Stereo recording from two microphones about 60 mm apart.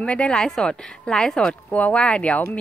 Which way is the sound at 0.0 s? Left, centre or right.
Centre.